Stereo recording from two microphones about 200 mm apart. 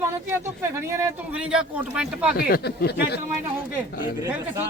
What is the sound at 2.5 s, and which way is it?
Speech, 55° left (ahead or behind).